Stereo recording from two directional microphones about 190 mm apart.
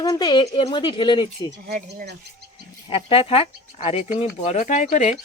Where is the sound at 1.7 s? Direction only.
40° right (ahead or behind).